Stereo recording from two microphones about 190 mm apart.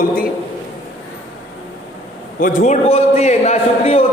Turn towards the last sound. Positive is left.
turn(degrees=30)  # may be behind; listen again after turning